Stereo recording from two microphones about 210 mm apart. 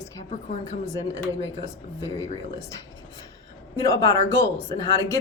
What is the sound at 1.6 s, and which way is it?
A woman's voice, 15° left (ahead or behind).